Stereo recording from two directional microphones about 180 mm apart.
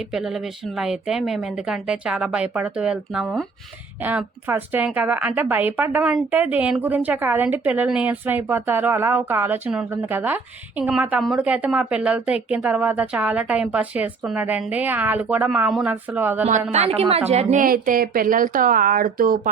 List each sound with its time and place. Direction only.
0.1 s speech: centre (ahead or behind)
16.7 s a woman's voice: 35° right (ahead or behind); by 19.4 s 50° right (ahead or behind)